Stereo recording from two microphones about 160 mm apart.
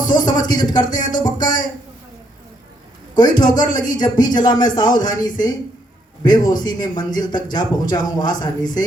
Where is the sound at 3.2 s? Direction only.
25° left (ahead or behind).